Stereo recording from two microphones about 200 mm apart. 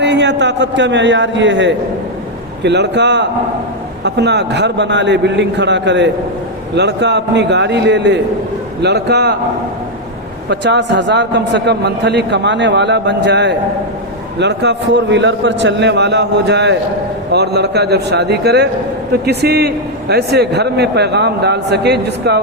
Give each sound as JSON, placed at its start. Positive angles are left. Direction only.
{"t": 0.0, "sound": "a man's voice", "side_deg": -60}
{"t": 10.5, "sound": "a man's voice", "side_deg": -60}